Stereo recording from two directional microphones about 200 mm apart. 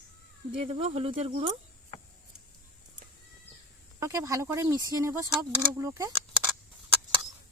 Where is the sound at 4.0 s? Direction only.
15° right (ahead or behind).